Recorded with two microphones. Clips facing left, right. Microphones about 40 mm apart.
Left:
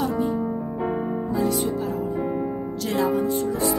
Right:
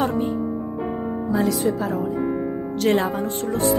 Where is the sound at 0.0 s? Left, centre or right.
Right.